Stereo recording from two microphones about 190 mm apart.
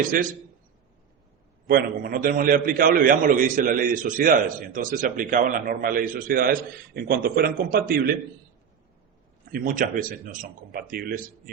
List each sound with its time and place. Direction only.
0.1 s a man's voice: 50° right (ahead or behind)
1.6 s a man's voice: 50° right (ahead or behind)
9.5 s a man's voice: 45° right (ahead or behind)